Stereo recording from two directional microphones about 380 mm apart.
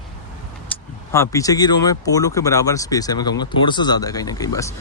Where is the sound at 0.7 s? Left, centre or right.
Centre.